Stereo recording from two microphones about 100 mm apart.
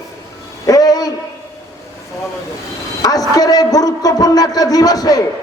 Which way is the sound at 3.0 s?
40° left (ahead or behind).